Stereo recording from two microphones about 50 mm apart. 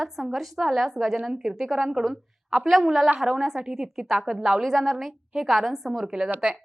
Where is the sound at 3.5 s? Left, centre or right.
Right.